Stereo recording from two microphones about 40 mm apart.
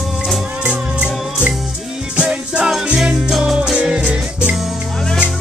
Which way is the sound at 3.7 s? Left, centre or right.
Right.